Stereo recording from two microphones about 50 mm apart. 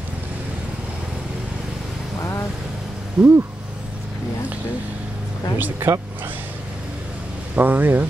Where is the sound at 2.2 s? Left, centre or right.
Left.